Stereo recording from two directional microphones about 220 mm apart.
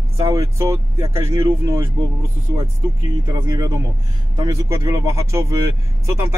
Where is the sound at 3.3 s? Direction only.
15° right (ahead or behind).